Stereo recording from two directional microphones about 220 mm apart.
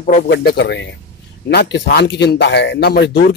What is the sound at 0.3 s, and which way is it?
Speech, 50° left (ahead or behind).